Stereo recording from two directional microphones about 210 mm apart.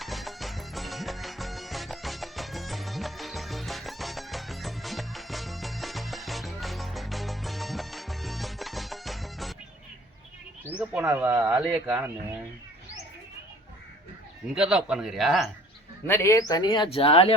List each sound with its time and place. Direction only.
0.0 s music: centre (ahead or behind)
10.7 s speech: 5° right (ahead or behind)
14.5 s speech: 5° right (ahead or behind)
16.0 s speech: 10° left (ahead or behind)